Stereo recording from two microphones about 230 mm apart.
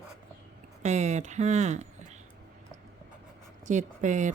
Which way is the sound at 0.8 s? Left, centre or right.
Right.